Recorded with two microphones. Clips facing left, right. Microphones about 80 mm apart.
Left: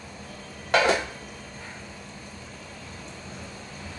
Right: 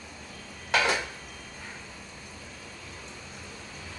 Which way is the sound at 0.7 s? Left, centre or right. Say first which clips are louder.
Left 5 dB; centre.